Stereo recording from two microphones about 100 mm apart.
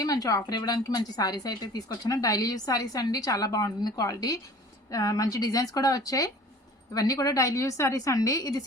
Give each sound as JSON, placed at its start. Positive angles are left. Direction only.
{"t": 0.0, "sound": "a woman's voice", "side_deg": 40}